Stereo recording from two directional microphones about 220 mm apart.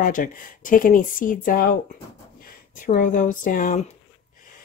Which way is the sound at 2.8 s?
35° left (ahead or behind).